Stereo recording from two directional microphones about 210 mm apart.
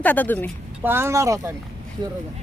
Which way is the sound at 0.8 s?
10° right (ahead or behind).